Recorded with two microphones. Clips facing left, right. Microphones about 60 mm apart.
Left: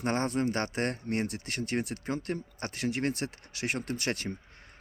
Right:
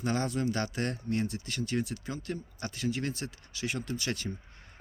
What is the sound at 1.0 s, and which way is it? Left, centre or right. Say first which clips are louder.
Speech: even; left.